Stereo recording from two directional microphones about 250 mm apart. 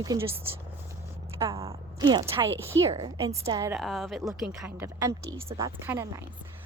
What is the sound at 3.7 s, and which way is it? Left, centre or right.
A woman's voice, centre.